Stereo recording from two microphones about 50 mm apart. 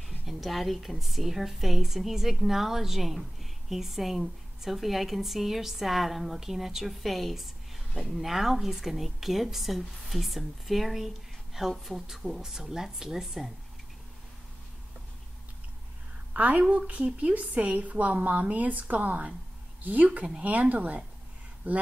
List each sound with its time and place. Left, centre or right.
0.3 s a woman's voice: centre
16.3 s a woman's voice: right